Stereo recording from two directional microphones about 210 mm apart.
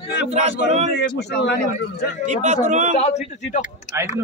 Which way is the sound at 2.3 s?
35° right (ahead or behind).